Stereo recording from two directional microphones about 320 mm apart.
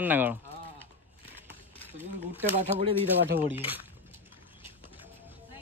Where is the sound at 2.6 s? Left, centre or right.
Right.